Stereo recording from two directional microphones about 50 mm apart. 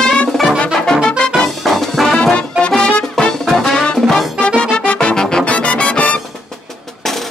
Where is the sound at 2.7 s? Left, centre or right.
Centre.